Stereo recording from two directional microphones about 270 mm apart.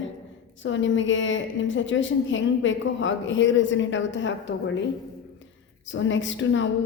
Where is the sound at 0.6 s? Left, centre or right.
Left.